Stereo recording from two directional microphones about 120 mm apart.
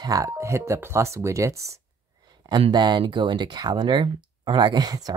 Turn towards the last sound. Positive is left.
turn(degrees=-35)  # may be behind; listen again after turning